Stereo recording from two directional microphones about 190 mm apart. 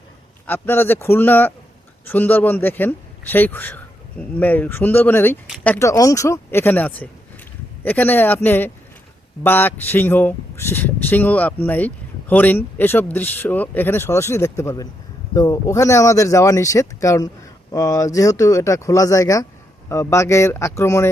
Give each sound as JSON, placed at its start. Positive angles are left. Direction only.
{"t": 0.4, "sound": "speech", "side_deg": 10}